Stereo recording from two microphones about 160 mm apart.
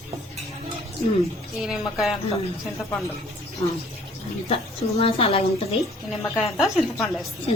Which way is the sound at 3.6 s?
40° left (ahead or behind).